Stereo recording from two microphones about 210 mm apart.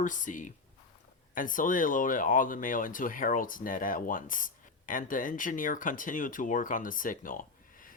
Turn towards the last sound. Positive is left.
turn(degrees=40)  # may be behind; listen again after turning